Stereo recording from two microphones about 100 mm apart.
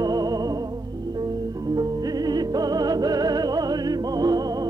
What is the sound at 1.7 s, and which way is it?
Music, 40° right (ahead or behind).